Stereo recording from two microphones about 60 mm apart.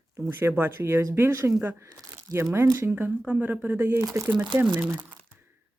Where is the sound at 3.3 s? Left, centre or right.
Right.